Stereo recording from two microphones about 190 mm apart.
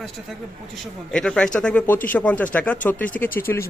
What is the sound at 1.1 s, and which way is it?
Speech, 5° left (ahead or behind).